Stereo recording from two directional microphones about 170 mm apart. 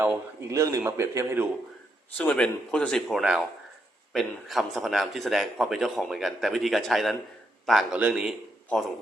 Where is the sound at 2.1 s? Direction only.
5° left (ahead or behind).